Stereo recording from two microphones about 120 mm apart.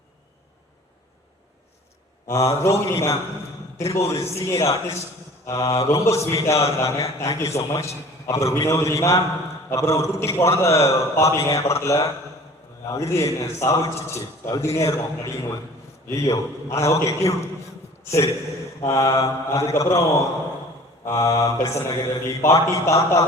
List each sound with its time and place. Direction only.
2.2 s a man's voice: 25° left (ahead or behind)
21.0 s a man's voice: 25° left (ahead or behind)